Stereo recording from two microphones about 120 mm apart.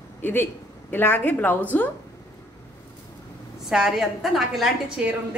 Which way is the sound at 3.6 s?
5° right (ahead or behind).